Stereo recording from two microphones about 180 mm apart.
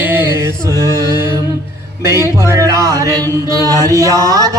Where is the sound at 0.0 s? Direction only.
15° right (ahead or behind).